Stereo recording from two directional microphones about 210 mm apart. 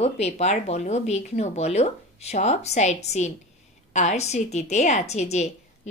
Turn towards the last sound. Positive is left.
turn(degrees=30)  # may be behind; listen again after turning